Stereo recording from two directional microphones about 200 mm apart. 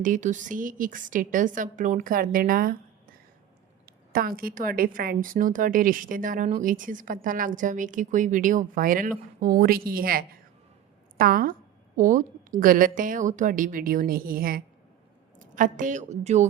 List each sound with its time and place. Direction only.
0.0 s a woman's voice: 40° right (ahead or behind)